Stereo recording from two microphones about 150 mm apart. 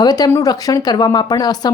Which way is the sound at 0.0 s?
25° left (ahead or behind).